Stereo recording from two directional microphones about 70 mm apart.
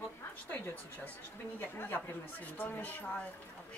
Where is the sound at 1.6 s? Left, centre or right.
Left.